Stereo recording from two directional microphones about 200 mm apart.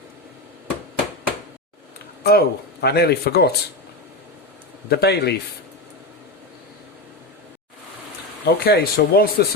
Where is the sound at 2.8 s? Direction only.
55° left (ahead or behind).